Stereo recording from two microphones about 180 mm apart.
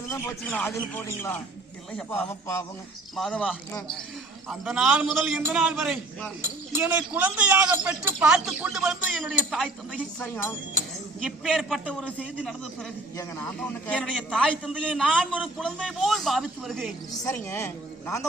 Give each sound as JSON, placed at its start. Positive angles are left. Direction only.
{"t": 0.1, "sound": "a man's voice", "side_deg": 10}
{"t": 13.6, "sound": "a man's voice", "side_deg": 5}
{"t": 17.2, "sound": "speech", "side_deg": 15}